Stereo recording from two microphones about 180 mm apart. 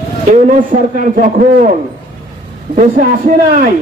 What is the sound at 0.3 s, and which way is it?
A man's voice, 45° right (ahead or behind).